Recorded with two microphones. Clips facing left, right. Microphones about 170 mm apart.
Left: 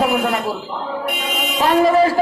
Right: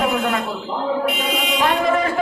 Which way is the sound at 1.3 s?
35° left (ahead or behind).